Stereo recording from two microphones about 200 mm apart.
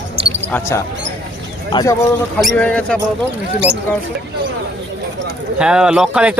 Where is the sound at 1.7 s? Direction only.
20° left (ahead or behind).